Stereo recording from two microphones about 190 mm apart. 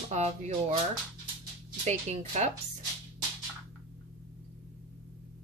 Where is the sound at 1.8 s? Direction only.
35° right (ahead or behind).